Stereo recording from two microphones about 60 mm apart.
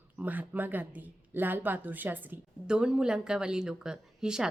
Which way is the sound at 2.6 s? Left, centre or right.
Centre.